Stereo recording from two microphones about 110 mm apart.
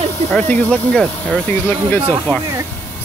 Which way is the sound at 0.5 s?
10° left (ahead or behind).